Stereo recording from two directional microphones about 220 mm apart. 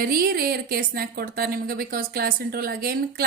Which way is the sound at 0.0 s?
45° right (ahead or behind).